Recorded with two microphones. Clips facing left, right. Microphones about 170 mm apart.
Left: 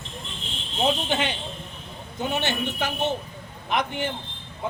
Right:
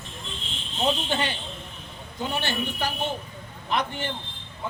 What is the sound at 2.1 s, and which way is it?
A man's voice, 20° left (ahead or behind).